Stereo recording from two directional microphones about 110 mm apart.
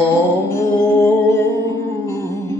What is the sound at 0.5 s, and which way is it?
Music, 25° left (ahead or behind).